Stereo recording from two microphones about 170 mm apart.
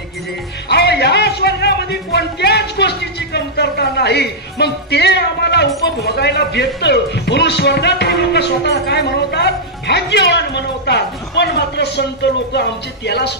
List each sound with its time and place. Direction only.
0.7 s speech: 75° left (ahead or behind)